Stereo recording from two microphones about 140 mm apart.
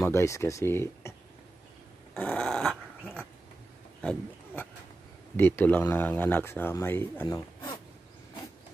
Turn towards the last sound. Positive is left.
turn(degrees=25)  # may be behind; listen again after turning